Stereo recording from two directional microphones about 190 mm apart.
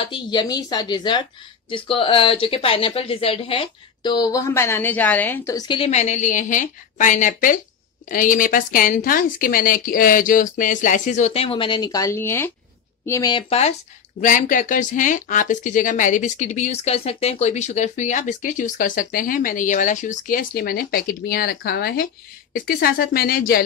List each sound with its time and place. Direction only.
0.0 s speech: 25° left (ahead or behind)
14.2 s speech: 45° left (ahead or behind)